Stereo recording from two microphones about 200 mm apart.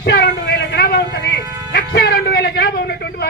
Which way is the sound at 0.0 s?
50° left (ahead or behind).